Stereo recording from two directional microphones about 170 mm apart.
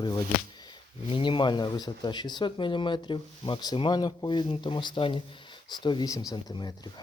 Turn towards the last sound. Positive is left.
turn(degrees=25)  # may be behind; listen again after turning